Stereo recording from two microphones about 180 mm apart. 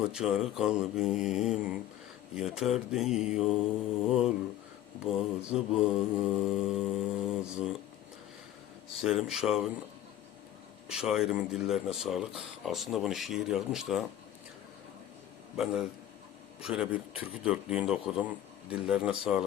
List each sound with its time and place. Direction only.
0.1 s speech: 5° right (ahead or behind)
9.0 s speech: centre (ahead or behind)
10.8 s speech: 5° right (ahead or behind)
15.5 s speech: 5° right (ahead or behind)